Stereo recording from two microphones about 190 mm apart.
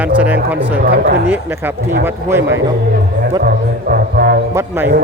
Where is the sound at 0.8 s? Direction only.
50° right (ahead or behind).